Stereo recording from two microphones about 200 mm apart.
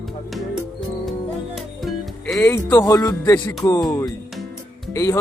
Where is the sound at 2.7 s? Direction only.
15° left (ahead or behind).